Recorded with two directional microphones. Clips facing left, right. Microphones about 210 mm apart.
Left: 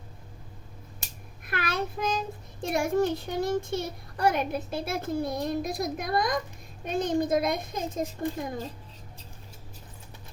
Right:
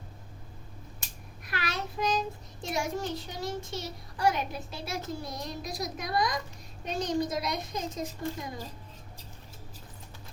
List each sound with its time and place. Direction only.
1.5 s child singing: 55° left (ahead or behind)
2.6 s a child's voice: 55° left (ahead or behind)